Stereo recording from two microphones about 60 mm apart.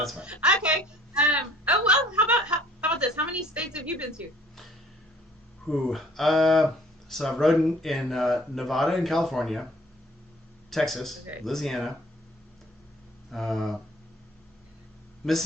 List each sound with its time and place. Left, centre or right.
0.3 s a sound: centre
2.1 s chuckle: right
3.5 s a woman's voice: right
5.6 s speech: centre
10.7 s speech: centre
13.3 s speech: centre
15.2 s speech: centre